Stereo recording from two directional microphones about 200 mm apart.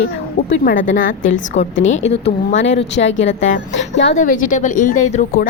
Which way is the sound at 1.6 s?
70° left (ahead or behind).